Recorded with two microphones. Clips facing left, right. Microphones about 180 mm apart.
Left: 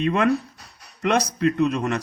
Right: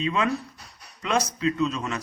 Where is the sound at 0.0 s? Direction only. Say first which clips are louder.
Left 5 dB; 60° left (ahead or behind).